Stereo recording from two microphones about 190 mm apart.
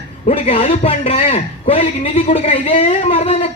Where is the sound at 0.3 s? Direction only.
30° left (ahead or behind).